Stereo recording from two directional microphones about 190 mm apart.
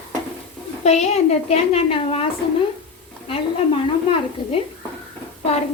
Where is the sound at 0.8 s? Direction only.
35° left (ahead or behind).